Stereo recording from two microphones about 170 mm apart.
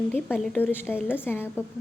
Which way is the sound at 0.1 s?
10° left (ahead or behind).